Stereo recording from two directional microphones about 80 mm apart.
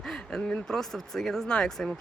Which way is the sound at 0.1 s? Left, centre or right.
Centre.